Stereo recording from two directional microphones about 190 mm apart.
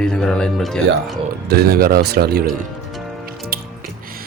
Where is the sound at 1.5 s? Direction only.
55° right (ahead or behind).